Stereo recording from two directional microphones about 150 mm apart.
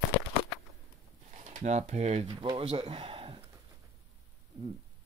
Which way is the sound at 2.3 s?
35° right (ahead or behind).